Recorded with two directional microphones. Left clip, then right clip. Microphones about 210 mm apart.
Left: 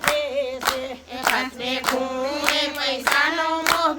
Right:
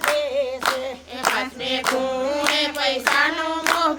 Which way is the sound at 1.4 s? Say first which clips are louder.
Right 1 dB; 5° right (ahead or behind).